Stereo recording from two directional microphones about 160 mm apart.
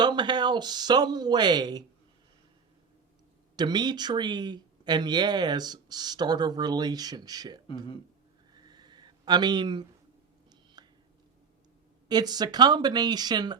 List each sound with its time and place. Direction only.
0.0 s speech: 25° right (ahead or behind)
3.5 s speech: 25° right (ahead or behind)
8.5 s a sound: 25° right (ahead or behind)
12.0 s speech: 25° right (ahead or behind)